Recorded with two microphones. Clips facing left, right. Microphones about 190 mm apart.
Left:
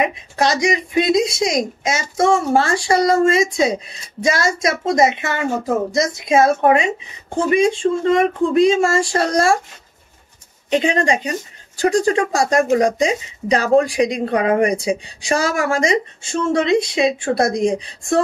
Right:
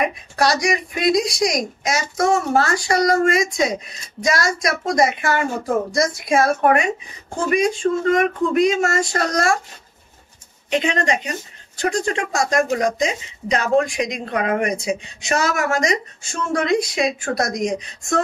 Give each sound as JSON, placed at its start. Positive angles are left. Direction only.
{"t": 0.0, "sound": "speech", "side_deg": 25}
{"t": 10.7, "sound": "speech", "side_deg": 30}